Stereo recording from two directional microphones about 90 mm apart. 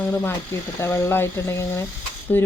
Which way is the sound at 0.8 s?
30° left (ahead or behind).